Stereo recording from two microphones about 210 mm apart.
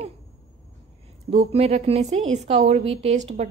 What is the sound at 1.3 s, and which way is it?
A woman's voice, 30° right (ahead or behind).